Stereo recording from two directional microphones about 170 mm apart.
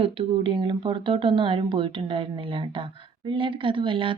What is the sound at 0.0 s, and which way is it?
Speech, 30° right (ahead or behind).